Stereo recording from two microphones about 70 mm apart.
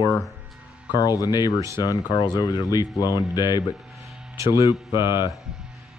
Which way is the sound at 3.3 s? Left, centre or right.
Left.